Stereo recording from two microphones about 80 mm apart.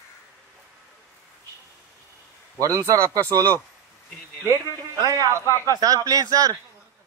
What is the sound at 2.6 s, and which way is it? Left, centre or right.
Speech, right.